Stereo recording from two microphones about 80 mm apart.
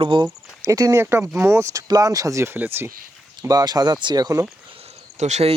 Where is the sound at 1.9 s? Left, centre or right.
Right.